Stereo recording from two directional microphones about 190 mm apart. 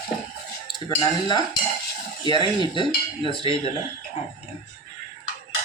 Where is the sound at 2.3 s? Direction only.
25° left (ahead or behind).